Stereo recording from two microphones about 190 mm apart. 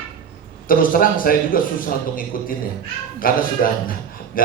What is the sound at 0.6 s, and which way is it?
A man's voice, 45° left (ahead or behind).